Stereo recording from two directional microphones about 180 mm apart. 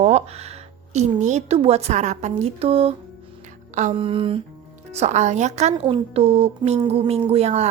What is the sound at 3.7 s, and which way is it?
Music, 40° right (ahead or behind).